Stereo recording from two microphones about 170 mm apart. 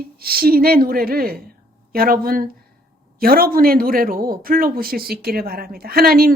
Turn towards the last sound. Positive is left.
turn(degrees=-60)  # may be behind; listen again after turning